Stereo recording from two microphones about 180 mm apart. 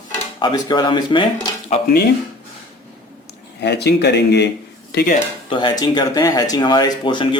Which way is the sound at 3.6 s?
70° left (ahead or behind).